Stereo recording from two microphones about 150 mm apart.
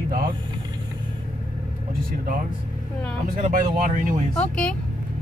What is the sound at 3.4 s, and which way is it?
Speech, 65° right (ahead or behind).